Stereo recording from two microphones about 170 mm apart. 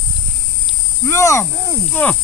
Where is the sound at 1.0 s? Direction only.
15° left (ahead or behind).